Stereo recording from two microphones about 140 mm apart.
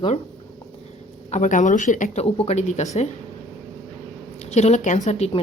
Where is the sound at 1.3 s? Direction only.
60° left (ahead or behind).